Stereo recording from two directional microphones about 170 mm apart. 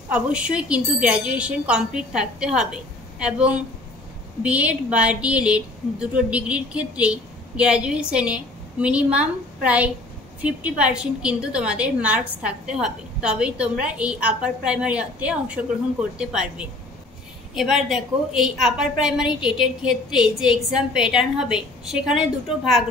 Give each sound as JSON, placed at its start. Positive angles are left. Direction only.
{"t": 0.1, "sound": "a woman's voice", "side_deg": -5}